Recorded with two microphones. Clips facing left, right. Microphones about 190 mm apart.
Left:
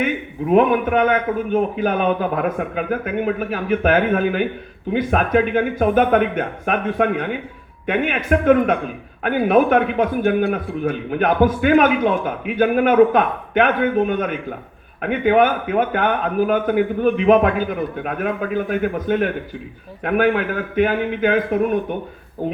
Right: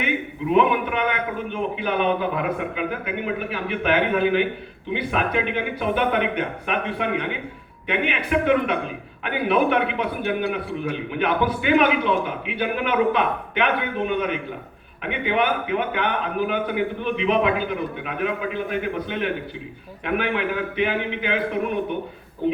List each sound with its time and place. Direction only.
0.5 s a man's voice: 45° left (ahead or behind)